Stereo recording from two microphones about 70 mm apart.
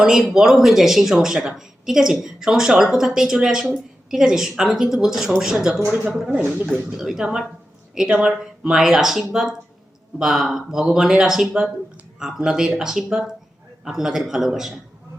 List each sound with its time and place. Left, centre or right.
0.0 s speech: centre
6.9 s speech: centre